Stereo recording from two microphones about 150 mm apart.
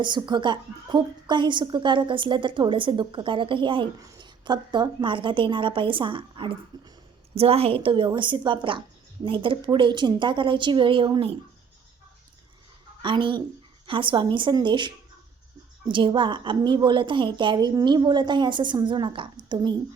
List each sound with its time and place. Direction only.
0.0 s a woman's voice: 30° right (ahead or behind)
13.0 s a woman's voice: 35° right (ahead or behind)